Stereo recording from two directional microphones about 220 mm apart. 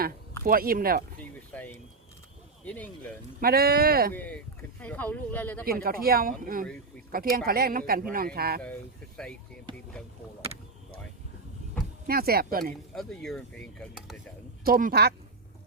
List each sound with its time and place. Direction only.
0.4 s speech: 40° right (ahead or behind)
1.5 s speech: 5° left (ahead or behind)
3.4 s speech: 45° right (ahead or behind)
4.1 s speech: 5° left (ahead or behind)
5.6 s speech: 40° right (ahead or behind)
8.6 s mechanisms: 5° left (ahead or behind)
12.0 s speech: 45° right (ahead or behind)
12.9 s mechanisms: centre (ahead or behind)
14.6 s speech: 40° right (ahead or behind)